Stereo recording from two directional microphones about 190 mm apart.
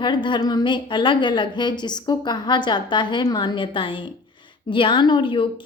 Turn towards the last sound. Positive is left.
turn(degrees=25)  # may be behind; listen again after turning